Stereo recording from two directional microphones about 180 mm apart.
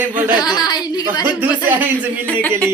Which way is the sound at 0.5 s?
25° left (ahead or behind).